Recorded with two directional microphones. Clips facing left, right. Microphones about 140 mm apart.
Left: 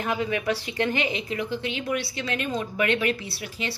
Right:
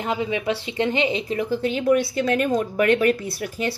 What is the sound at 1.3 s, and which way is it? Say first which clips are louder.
A woman's voice: right 6 dB; 40° right (ahead or behind).